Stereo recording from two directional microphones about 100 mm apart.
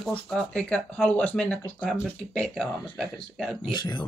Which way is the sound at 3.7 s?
50° left (ahead or behind).